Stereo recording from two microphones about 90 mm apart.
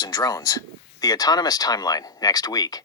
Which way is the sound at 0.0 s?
45° left (ahead or behind).